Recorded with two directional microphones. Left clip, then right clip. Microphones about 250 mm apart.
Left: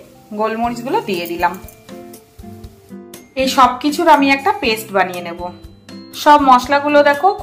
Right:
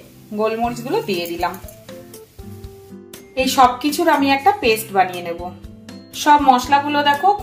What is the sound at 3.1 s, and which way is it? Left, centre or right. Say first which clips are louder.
Music: left 2 dB; centre.